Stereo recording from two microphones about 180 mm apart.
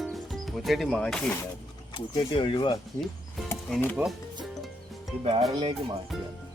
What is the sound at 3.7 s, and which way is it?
Speech, 10° left (ahead or behind).